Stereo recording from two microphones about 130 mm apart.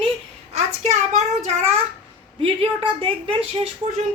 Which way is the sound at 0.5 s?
60° right (ahead or behind).